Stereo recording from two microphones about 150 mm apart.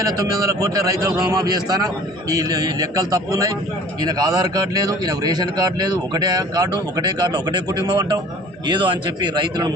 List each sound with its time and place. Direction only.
0.0 s a man's voice: 25° right (ahead or behind)